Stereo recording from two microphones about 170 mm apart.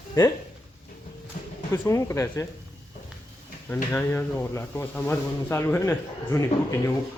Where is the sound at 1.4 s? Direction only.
50° left (ahead or behind).